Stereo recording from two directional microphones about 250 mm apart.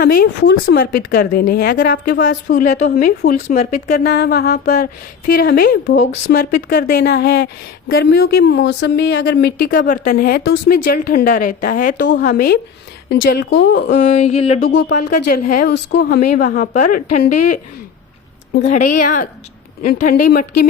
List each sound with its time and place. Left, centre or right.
0.0 s a woman's voice: left
13.9 s a sound: left
14.9 s a woman's voice: left
15.3 s a woman's voice: left
16.3 s a woman's voice: left
18.6 s a woman's voice: left